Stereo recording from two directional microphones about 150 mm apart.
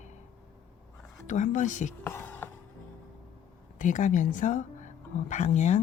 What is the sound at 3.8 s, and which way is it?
Speech, 55° left (ahead or behind).